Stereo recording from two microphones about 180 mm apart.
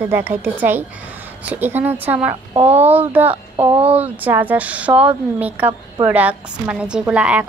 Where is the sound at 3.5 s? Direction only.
30° right (ahead or behind).